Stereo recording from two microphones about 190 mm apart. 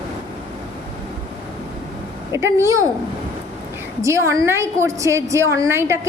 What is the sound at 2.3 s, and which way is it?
Speech, 15° right (ahead or behind).